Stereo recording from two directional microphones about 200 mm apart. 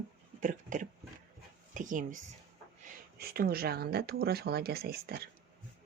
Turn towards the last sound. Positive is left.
turn(degrees=-50)  # may be behind; listen again after turning